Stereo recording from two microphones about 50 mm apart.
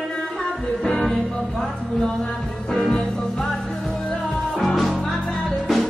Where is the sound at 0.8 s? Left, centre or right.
Centre.